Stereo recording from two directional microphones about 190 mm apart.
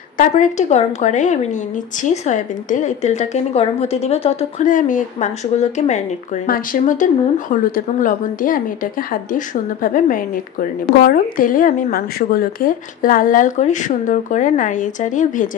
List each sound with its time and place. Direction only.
0.2 s a woman's voice: 40° left (ahead or behind)